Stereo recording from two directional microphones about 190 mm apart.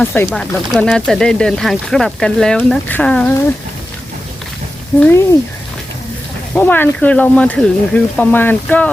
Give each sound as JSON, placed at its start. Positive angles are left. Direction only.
{"t": 0.0, "sound": "speech", "side_deg": 10}
{"t": 4.9, "sound": "speech", "side_deg": 5}
{"t": 6.5, "sound": "speech", "side_deg": 10}